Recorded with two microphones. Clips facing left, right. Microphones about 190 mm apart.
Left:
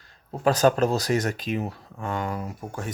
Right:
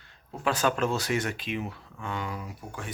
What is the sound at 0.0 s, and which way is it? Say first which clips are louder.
Speech: left 7 dB; 40° left (ahead or behind).